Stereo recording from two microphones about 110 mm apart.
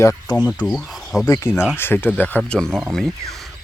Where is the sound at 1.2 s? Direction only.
25° left (ahead or behind); by 2.8 s 5° left (ahead or behind).